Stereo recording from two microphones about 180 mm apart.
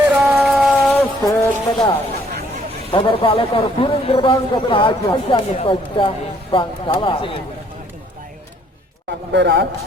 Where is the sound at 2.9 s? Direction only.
25° left (ahead or behind).